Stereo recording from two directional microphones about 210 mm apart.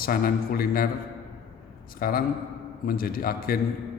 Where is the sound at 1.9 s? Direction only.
45° left (ahead or behind).